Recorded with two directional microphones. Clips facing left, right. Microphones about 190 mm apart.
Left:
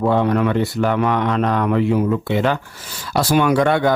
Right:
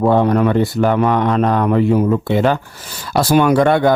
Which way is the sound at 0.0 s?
40° right (ahead or behind).